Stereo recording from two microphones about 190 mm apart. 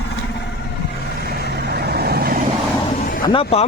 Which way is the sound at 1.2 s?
55° right (ahead or behind).